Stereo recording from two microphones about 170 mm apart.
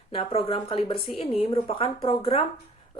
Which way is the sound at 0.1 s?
35° left (ahead or behind).